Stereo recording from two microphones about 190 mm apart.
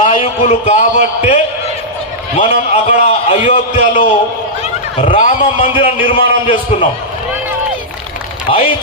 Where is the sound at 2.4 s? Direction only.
35° left (ahead or behind).